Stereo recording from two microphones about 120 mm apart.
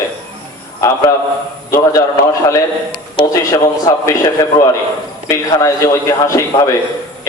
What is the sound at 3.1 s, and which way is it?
Speech, 35° left (ahead or behind).